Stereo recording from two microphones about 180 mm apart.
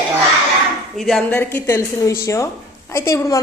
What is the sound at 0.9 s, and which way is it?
A woman's voice, centre (ahead or behind).